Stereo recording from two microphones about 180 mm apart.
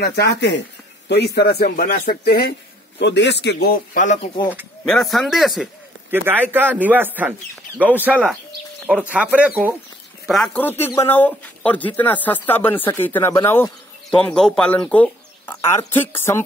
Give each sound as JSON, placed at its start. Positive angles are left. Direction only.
{"t": 0.0, "sound": "a man's voice", "side_deg": 65}
{"t": 3.0, "sound": "a man's voice", "side_deg": 75}
{"t": 4.8, "sound": "speech", "side_deg": 0}
{"t": 6.0, "sound": "speech", "side_deg": -10}
{"t": 10.2, "sound": "speech", "side_deg": 0}